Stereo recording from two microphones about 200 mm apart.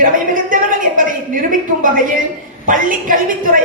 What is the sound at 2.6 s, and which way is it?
Speech, 40° right (ahead or behind).